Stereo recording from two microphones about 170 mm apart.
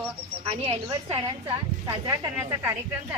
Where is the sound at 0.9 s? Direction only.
25° right (ahead or behind).